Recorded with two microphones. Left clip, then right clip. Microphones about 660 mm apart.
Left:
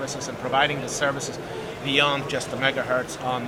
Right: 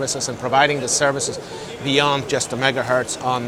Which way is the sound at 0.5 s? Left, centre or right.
Right.